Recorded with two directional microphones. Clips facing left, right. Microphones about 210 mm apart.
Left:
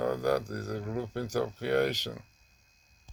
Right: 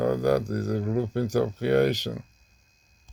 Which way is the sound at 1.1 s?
10° right (ahead or behind).